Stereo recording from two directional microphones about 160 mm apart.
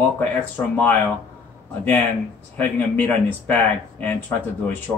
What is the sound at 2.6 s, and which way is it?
Speech, 10° left (ahead or behind).